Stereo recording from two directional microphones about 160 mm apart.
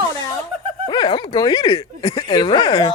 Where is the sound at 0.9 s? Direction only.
25° left (ahead or behind).